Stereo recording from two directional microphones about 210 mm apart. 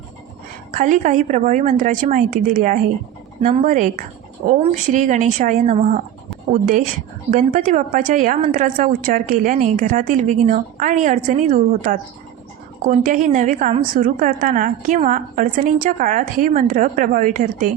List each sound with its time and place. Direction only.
0.7 s a woman's voice: 35° right (ahead or behind)